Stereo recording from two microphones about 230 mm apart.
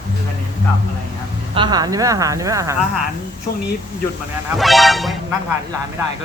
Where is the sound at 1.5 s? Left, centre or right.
Centre.